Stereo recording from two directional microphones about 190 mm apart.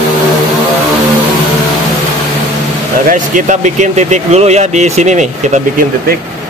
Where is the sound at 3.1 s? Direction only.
40° right (ahead or behind).